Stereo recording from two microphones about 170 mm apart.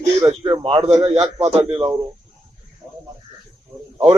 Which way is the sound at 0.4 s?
30° right (ahead or behind).